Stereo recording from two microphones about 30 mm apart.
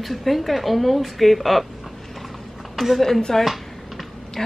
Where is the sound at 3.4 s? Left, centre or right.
Centre.